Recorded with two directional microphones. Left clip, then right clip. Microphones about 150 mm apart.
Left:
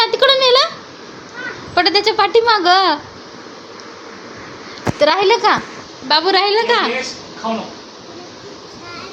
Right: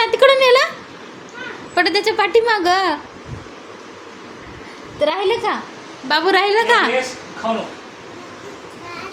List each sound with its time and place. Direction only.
0.0 s a sound: 15° right (ahead or behind)
1.7 s a woman's voice: 20° right (ahead or behind)
4.9 s a woman's voice: 5° left (ahead or behind)
6.1 s a woman's voice: 10° right (ahead or behind)